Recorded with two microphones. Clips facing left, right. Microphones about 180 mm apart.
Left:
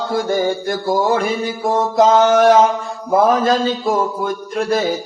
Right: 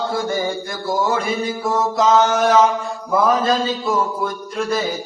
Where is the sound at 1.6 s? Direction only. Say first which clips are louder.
Left 4 dB; 55° left (ahead or behind).